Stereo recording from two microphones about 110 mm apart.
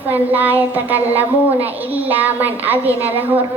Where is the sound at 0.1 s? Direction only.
15° right (ahead or behind).